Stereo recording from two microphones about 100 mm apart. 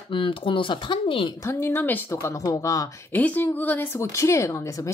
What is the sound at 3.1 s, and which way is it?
Speech, 15° left (ahead or behind).